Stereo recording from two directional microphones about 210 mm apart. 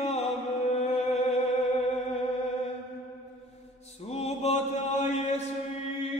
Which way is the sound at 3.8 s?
30° left (ahead or behind).